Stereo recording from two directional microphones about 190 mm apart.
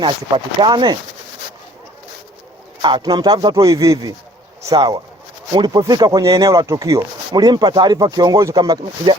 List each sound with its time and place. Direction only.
0.0 s speech: 25° right (ahead or behind)
2.8 s speech: 20° right (ahead or behind)